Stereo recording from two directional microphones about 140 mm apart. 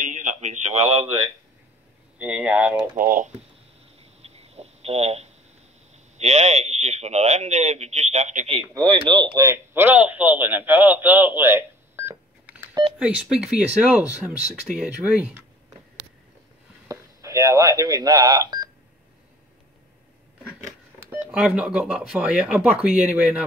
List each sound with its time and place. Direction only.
0.0 s a man's voice: 60° right (ahead or behind); by 1.3 s 40° right (ahead or behind)
2.1 s a man's voice: 10° right (ahead or behind)
3.0 s speech: 85° right
4.0 s a sound: 45° right (ahead or behind)
6.1 s a man's voice: 50° right (ahead or behind)
8.7 s a man's voice: 35° right (ahead or behind); by 12.2 s 15° right (ahead or behind)
13.0 s a man's voice: 5° right (ahead or behind)
16.8 s speech: 25° right (ahead or behind)
21.1 s a man's voice: 5° right (ahead or behind)